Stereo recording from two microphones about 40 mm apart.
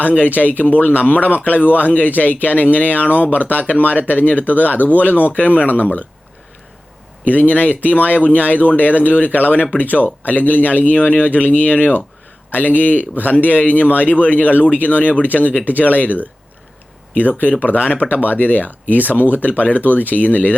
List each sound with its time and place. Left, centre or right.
0.3 s speech: left
7.3 s speech: left
17.2 s speech: left